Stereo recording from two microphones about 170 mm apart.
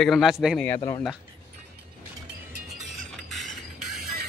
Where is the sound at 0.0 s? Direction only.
Centre (ahead or behind).